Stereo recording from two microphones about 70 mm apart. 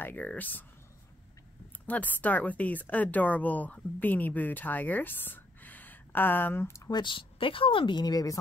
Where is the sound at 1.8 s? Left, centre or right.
Left.